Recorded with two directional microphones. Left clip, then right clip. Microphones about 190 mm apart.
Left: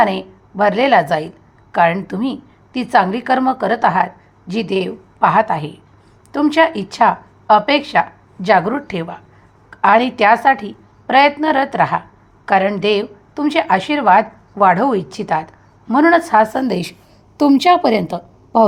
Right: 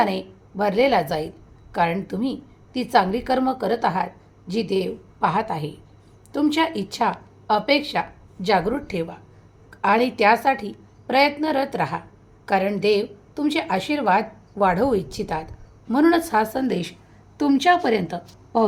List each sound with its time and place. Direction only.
0.0 s a woman's voice: 20° left (ahead or behind)
17.3 s a woman's voice: 40° left (ahead or behind)